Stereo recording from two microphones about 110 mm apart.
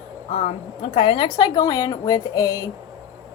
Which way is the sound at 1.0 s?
55° left (ahead or behind).